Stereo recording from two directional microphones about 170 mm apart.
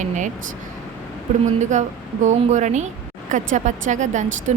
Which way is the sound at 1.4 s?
45° right (ahead or behind).